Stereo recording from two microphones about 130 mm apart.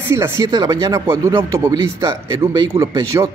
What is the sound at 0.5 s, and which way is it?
Speech, 35° right (ahead or behind).